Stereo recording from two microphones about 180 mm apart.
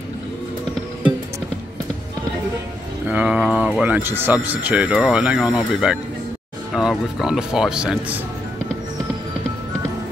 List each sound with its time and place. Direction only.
3.1 s speech: 5° right (ahead or behind)